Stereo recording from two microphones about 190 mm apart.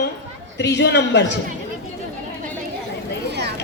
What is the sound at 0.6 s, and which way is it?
Speech, 65° left (ahead or behind).